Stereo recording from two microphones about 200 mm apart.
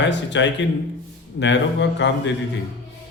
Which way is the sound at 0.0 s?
60° left (ahead or behind).